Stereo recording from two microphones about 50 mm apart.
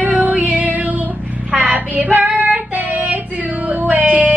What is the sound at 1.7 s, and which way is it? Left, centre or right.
Child singing, right.